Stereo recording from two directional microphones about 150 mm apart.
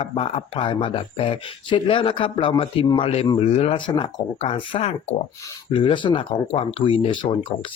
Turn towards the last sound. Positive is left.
turn(degrees=35)  # may be behind; listen again after turning